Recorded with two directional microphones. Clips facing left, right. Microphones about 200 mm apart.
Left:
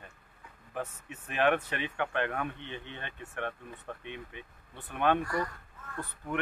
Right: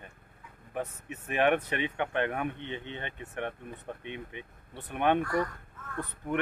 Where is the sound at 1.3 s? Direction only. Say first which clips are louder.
Right 2 dB; 20° right (ahead or behind).